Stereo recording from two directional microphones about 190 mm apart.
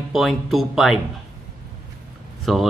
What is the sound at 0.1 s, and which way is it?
Speech, centre (ahead or behind).